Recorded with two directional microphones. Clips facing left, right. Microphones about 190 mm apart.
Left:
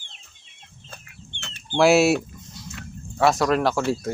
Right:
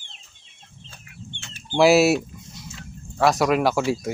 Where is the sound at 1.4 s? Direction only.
65° left (ahead or behind).